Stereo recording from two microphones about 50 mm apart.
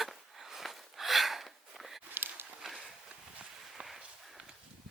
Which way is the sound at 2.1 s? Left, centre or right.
Right.